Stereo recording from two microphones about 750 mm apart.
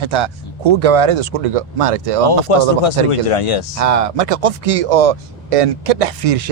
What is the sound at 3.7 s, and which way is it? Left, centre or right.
Speech, right.